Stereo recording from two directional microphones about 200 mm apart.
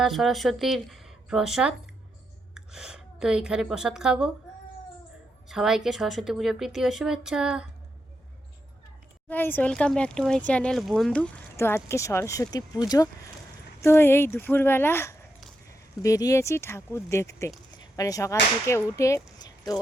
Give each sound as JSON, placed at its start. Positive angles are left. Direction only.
{"t": 0.0, "sound": "a woman's voice", "side_deg": 0}
{"t": 5.5, "sound": "a woman's voice", "side_deg": 0}
{"t": 9.3, "sound": "speech", "side_deg": 10}